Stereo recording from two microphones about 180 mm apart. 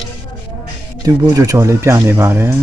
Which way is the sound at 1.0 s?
15° right (ahead or behind).